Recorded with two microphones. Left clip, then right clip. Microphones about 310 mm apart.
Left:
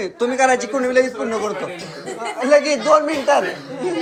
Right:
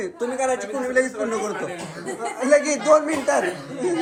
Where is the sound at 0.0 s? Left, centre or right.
Centre.